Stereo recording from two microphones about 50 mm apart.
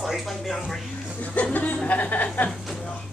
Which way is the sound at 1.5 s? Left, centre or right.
Left.